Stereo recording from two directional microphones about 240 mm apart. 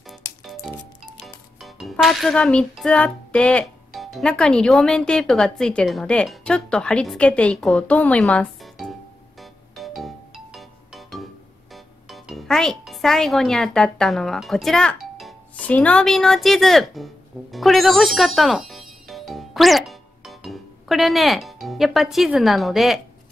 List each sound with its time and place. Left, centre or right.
0.4 s music: centre
11.7 s a child's voice: centre